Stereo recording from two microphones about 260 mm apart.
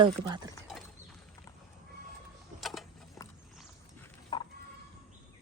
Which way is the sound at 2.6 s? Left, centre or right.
Centre.